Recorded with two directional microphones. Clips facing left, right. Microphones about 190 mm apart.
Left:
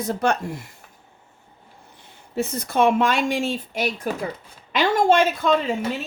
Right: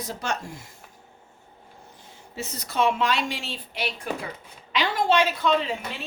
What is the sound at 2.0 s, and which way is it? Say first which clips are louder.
Speech: left 10 dB; 60° left (ahead or behind).